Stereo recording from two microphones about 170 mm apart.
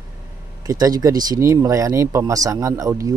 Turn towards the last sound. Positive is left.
turn(degrees=-20)  # may be behind; listen again after turning